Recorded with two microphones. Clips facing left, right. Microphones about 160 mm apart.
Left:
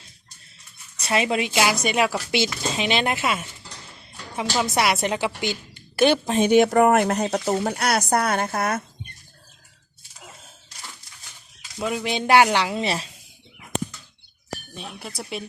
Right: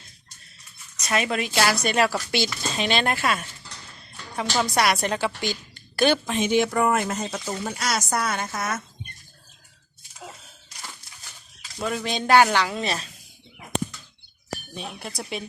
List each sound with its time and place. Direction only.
0.9 s a woman's voice: 25° left (ahead or behind)
1.5 s speech: 15° left (ahead or behind)
4.4 s speech: 5° left (ahead or behind)
4.7 s a woman's voice: 20° left (ahead or behind)
6.2 s speech: 35° left (ahead or behind)
6.5 s speech: 60° left (ahead or behind)
11.8 s a woman's voice: 10° left (ahead or behind)
14.8 s speech: centre (ahead or behind)